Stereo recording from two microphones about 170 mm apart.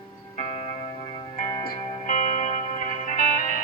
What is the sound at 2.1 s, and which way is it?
Music, 45° left (ahead or behind).